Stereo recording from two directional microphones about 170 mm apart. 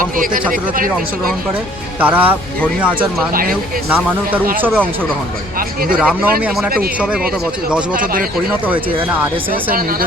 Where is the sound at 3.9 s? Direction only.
10° right (ahead or behind).